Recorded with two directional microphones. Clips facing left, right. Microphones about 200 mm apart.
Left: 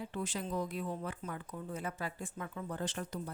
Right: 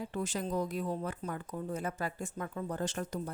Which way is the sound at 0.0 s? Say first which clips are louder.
Right 3 dB; 45° right (ahead or behind).